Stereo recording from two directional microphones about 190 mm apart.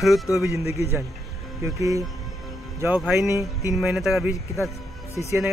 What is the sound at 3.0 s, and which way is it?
Speech, centre (ahead or behind).